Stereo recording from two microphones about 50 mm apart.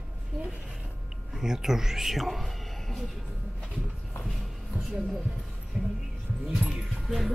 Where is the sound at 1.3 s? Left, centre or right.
Centre.